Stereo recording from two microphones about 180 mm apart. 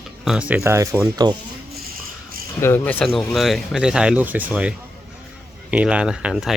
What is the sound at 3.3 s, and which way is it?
Speech, centre (ahead or behind).